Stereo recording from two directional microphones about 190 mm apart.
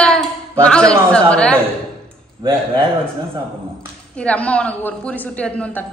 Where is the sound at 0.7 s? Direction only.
5° left (ahead or behind).